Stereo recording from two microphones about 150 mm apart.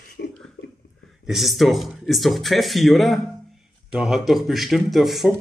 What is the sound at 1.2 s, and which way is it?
Speech, centre (ahead or behind).